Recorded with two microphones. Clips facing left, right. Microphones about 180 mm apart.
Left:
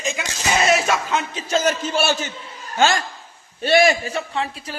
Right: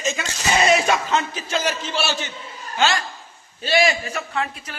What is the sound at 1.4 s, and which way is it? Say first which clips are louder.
A man's voice: left 4 dB; 45° left (ahead or behind).